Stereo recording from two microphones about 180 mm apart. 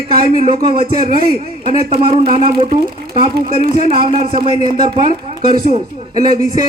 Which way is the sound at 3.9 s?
30° right (ahead or behind).